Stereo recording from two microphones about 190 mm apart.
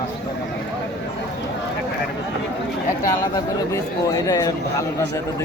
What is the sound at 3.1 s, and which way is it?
Speech, 15° left (ahead or behind).